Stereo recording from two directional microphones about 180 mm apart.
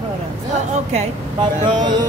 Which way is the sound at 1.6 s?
25° right (ahead or behind).